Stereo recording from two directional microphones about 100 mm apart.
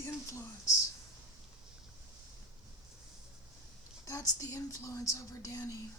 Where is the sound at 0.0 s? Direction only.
30° left (ahead or behind).